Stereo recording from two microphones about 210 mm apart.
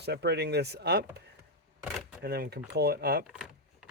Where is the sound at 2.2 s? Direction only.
50° right (ahead or behind).